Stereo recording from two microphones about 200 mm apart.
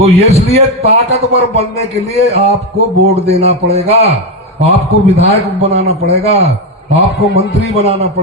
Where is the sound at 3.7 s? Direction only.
30° right (ahead or behind).